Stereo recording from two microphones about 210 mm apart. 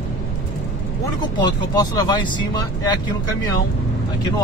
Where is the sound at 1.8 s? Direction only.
20° left (ahead or behind).